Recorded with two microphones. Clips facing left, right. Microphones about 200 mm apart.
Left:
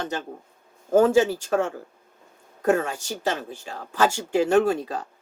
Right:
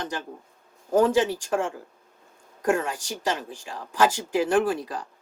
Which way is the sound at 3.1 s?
30° left (ahead or behind).